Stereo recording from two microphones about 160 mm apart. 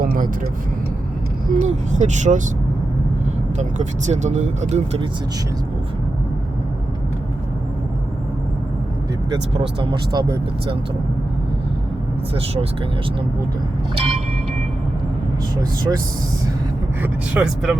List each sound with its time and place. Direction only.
0.0 s vehicle: 60° right (ahead or behind)
1.5 s speech: 50° right (ahead or behind)
3.6 s speech: 45° right (ahead or behind)
9.3 s speech: 25° right (ahead or behind)
13.9 s vehicle: 40° right (ahead or behind)
17.0 s speech: 10° right (ahead or behind)